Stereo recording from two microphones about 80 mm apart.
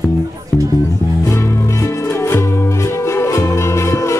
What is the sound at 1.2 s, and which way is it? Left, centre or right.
Music, left.